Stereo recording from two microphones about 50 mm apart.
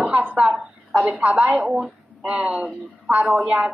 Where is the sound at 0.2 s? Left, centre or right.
Right.